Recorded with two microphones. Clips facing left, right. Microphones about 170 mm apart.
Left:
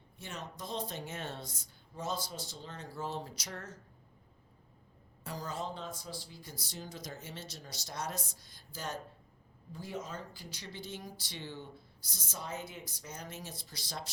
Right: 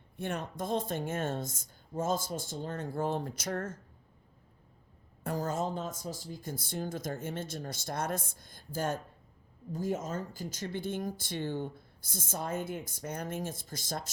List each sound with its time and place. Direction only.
0.2 s speech: 55° right (ahead or behind)
5.2 s speech: 50° right (ahead or behind)